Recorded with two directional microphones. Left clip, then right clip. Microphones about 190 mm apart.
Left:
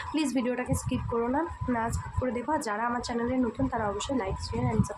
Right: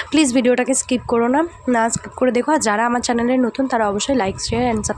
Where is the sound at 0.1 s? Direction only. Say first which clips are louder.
Right 14 dB; 45° right (ahead or behind).